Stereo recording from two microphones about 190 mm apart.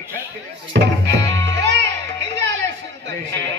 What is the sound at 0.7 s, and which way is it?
Speech, 70° right (ahead or behind).